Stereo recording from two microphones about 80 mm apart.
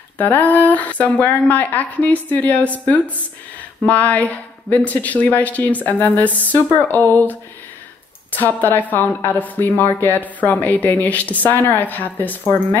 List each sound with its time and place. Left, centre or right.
0.2 s a woman's voice: left